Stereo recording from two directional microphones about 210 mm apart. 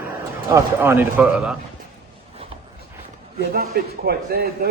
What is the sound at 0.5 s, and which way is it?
A man's voice, 10° right (ahead or behind).